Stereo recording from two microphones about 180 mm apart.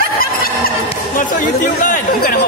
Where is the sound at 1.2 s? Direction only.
45° left (ahead or behind).